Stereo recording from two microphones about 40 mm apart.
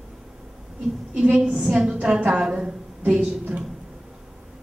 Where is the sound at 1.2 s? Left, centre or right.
Right.